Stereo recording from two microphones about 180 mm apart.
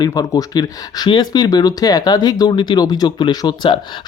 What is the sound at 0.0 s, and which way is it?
Speech, 20° left (ahead or behind).